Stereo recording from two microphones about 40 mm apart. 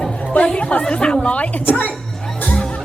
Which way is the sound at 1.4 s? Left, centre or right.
Left.